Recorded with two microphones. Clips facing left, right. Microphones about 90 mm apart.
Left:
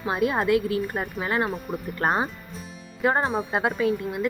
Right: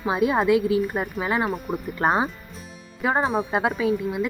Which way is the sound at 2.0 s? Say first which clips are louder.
Right 3 dB; 15° right (ahead or behind).